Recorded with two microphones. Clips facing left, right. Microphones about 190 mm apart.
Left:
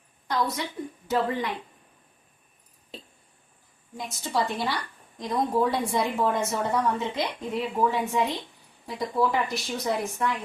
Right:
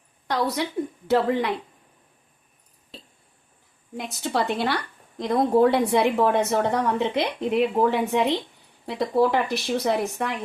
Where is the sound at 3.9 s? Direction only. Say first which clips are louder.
Right 3 dB; 65° right (ahead or behind).